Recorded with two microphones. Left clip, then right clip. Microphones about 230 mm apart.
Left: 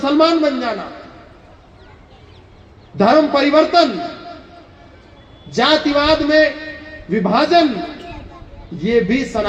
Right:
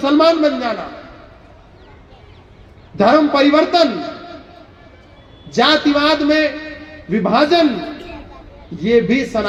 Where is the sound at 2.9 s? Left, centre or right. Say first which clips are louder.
Right 1 dB; right.